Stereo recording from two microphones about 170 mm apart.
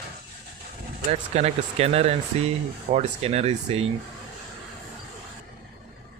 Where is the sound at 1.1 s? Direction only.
40° right (ahead or behind).